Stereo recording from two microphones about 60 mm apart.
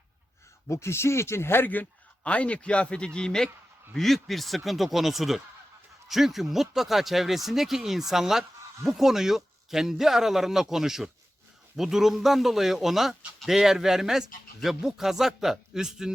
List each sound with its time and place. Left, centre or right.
0.7 s speech: left
1.6 s a man's voice: left
2.2 s a man's voice: centre